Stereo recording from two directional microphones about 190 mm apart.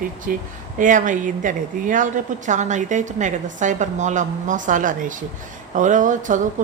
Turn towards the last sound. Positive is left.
turn(degrees=-40)  # may be behind; listen again after turning